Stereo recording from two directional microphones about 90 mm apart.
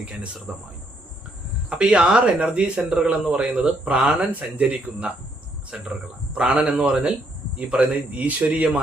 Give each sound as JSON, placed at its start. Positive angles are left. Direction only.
{"t": 0.0, "sound": "speech", "side_deg": -10}
{"t": 1.7, "sound": "speech", "side_deg": -10}